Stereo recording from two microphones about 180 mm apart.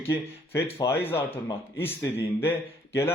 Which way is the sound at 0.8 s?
25° left (ahead or behind).